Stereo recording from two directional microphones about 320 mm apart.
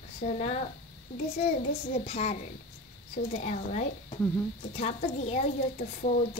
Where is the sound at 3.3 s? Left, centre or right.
Left.